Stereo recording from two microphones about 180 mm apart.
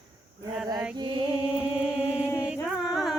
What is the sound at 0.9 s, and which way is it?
Mantra, 25° right (ahead or behind).